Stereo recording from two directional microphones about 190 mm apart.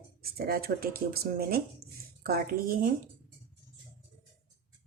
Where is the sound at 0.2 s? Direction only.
50° right (ahead or behind).